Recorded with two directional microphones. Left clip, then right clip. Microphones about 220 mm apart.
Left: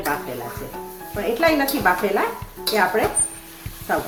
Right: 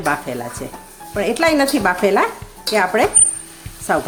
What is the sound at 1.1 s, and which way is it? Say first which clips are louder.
Speech: right 3 dB; 55° right (ahead or behind).